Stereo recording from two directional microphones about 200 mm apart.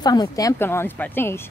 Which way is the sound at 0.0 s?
20° left (ahead or behind).